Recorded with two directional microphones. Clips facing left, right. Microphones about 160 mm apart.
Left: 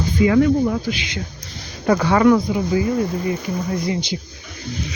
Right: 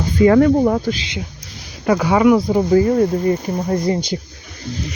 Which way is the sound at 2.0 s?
10° right (ahead or behind).